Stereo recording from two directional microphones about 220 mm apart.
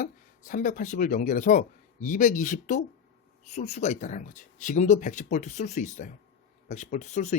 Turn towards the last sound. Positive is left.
turn(degrees=30)  # may be behind; listen again after turning